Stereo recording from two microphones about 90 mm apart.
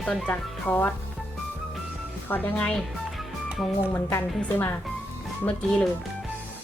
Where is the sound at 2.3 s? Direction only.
15° left (ahead or behind).